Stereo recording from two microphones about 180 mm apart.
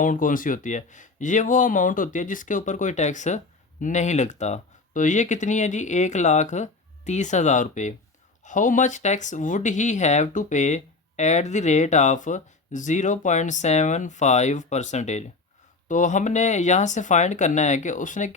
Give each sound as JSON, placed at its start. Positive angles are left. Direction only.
{"t": 0.0, "sound": "speech", "side_deg": 45}